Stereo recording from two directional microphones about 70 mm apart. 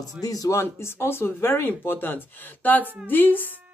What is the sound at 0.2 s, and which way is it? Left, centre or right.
Speech, left.